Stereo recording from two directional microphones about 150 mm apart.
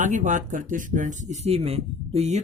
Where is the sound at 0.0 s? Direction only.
55° right (ahead or behind).